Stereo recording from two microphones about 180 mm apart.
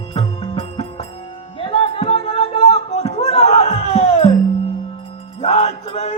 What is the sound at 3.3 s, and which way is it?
Music, 35° left (ahead or behind).